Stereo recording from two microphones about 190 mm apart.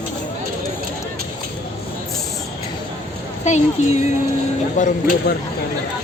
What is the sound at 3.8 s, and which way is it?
Speech, 40° left (ahead or behind).